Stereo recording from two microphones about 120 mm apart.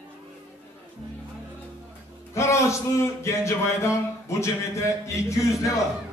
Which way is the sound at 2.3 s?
25° left (ahead or behind).